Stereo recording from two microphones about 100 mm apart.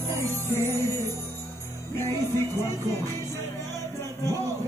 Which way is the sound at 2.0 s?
30° left (ahead or behind).